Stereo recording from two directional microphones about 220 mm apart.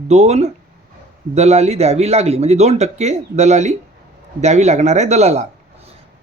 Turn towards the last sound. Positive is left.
turn(degrees=-30)  # may be behind; listen again after turning